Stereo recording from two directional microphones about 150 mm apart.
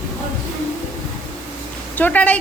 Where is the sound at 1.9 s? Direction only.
10° left (ahead or behind).